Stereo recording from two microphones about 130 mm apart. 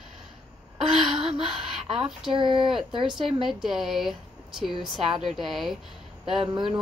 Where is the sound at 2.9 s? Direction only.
40° right (ahead or behind).